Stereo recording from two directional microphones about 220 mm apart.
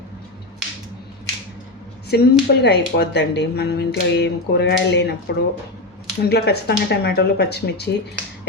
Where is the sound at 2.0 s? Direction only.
45° left (ahead or behind).